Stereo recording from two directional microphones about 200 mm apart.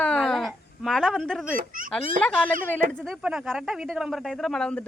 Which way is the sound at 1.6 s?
40° right (ahead or behind).